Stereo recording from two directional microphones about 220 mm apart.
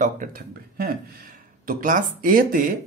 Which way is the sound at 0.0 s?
40° right (ahead or behind).